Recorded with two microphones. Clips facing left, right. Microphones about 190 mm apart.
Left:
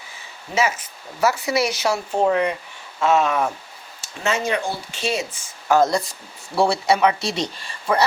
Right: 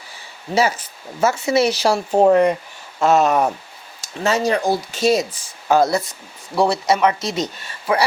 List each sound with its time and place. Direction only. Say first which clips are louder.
0.5 s speech: right 3 dB; 35° right (ahead or behind)
5.6 s speech: right 1 dB; 15° right (ahead or behind)
5.9 s speech: right 2 dB; centre (ahead or behind)